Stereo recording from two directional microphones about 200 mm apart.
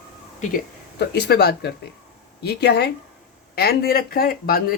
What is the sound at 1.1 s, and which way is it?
Speech, 55° left (ahead or behind).